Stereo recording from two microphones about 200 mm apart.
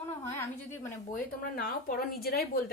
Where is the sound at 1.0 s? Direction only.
45° left (ahead or behind).